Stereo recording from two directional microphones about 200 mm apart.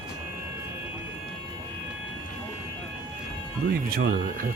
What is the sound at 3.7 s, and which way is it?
Speech, 50° right (ahead or behind).